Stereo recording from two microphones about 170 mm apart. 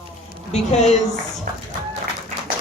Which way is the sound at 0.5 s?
40° left (ahead or behind).